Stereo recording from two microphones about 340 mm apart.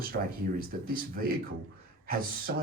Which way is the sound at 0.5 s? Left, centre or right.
Right.